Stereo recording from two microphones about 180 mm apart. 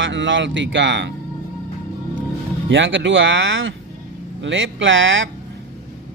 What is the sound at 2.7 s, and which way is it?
Speech, 90° right.